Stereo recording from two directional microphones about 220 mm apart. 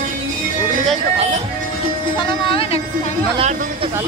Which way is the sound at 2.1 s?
25° left (ahead or behind).